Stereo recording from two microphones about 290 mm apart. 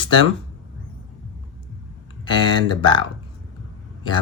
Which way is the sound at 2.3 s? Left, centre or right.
Centre.